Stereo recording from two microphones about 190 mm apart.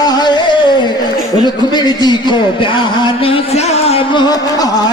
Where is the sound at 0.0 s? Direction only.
20° left (ahead or behind).